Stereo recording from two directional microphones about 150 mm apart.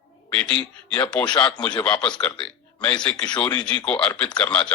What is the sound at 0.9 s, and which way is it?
A woman's voice, 5° left (ahead or behind).